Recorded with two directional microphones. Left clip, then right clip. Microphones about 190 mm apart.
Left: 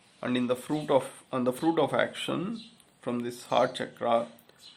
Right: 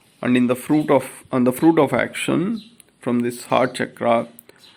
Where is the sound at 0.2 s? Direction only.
20° right (ahead or behind).